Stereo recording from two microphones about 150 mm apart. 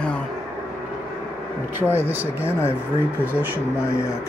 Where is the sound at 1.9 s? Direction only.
15° right (ahead or behind).